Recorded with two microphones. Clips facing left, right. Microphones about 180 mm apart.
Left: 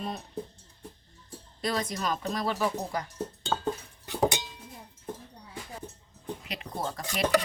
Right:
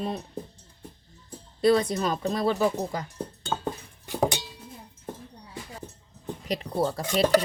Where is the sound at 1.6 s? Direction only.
30° right (ahead or behind).